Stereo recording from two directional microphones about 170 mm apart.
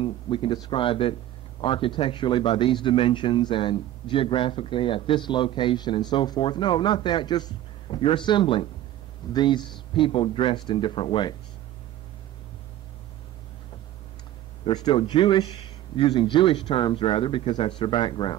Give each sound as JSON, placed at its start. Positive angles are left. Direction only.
{"t": 0.0, "sound": "speech", "side_deg": 30}
{"t": 14.6, "sound": "speech", "side_deg": 25}